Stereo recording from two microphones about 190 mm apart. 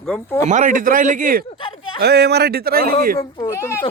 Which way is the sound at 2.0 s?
60° right (ahead or behind).